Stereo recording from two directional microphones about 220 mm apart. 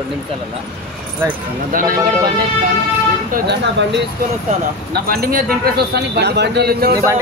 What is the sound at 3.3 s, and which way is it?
Speech, 50° right (ahead or behind).